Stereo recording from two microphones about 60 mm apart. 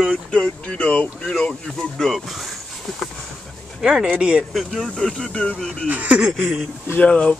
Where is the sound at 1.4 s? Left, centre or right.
Centre.